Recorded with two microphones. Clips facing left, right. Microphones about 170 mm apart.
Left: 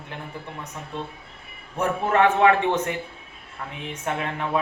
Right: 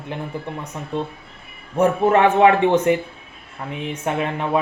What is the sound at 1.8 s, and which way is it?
A man's voice, 15° right (ahead or behind).